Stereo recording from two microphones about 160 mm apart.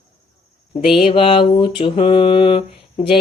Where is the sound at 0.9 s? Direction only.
35° left (ahead or behind).